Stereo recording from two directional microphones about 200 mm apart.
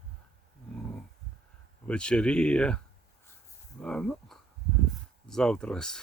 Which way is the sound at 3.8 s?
5° left (ahead or behind).